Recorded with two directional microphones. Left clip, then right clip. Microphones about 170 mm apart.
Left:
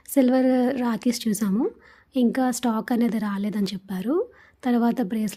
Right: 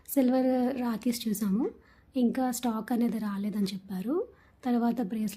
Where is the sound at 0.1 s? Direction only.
30° left (ahead or behind).